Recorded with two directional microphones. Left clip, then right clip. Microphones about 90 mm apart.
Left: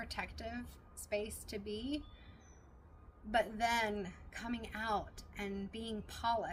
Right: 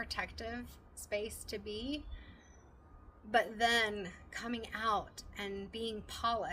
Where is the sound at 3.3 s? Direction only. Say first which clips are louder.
Right 3 dB; 40° right (ahead or behind).